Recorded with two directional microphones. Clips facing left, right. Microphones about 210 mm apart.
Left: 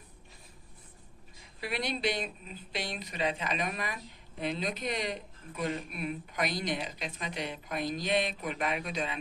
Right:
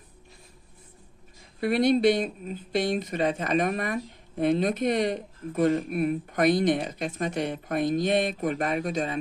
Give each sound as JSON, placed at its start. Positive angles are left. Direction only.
{"t": 1.6, "sound": "speech", "side_deg": -50}